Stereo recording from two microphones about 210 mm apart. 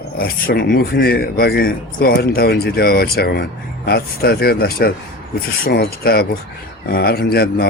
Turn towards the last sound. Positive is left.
turn(degrees=50)  # may be behind; listen again after turning